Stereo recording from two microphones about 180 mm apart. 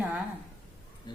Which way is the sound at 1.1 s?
25° left (ahead or behind).